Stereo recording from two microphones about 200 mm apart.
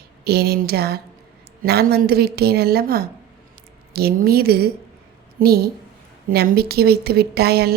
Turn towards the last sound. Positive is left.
turn(degrees=-50)  # may be behind; listen again after turning